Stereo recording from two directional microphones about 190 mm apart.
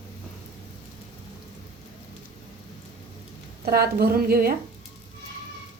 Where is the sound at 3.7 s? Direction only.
55° right (ahead or behind).